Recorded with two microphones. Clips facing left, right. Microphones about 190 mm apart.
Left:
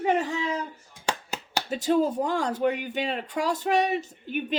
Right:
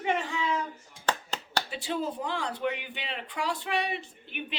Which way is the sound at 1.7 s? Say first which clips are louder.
Left 13 dB; 40° left (ahead or behind).